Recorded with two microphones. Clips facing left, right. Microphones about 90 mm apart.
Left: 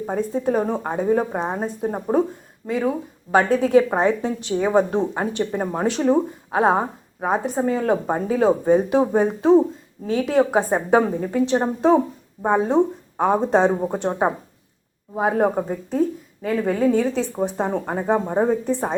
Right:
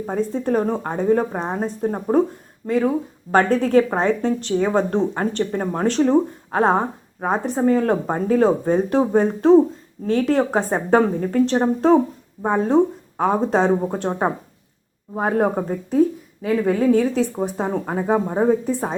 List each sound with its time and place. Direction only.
0.0 s a woman's voice: 5° left (ahead or behind)